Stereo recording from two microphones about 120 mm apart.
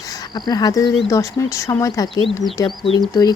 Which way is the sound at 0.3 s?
35° left (ahead or behind).